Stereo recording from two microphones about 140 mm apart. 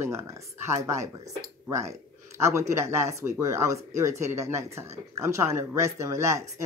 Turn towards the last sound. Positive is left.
turn(degrees=-20)  # may be behind; listen again after turning